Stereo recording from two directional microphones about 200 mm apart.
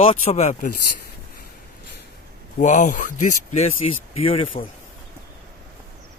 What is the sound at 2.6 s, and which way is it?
Speech, 40° left (ahead or behind).